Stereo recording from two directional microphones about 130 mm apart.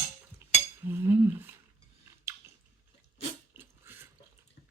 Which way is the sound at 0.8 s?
20° right (ahead or behind).